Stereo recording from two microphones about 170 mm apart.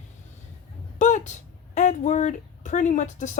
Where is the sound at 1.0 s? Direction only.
45° left (ahead or behind).